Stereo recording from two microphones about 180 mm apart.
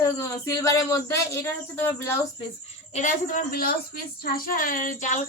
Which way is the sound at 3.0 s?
45° left (ahead or behind).